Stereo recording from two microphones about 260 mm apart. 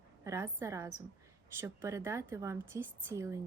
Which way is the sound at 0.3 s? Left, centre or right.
Centre.